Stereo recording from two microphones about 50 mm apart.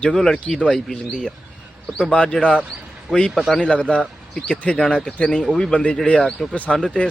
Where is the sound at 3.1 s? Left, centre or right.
Centre.